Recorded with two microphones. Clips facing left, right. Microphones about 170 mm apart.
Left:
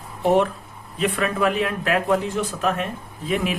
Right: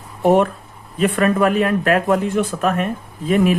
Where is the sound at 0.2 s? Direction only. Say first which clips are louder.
Right 4 dB; 50° right (ahead or behind).